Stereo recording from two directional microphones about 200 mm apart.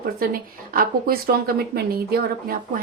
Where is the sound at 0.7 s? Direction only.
45° right (ahead or behind).